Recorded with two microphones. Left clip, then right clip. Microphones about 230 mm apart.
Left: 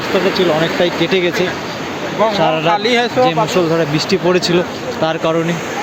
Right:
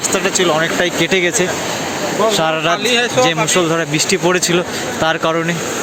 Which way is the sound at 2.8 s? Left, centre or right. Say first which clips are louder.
Left 1 dB; left.